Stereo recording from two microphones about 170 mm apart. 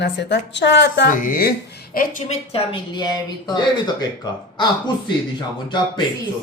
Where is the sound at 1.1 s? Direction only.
55° left (ahead or behind).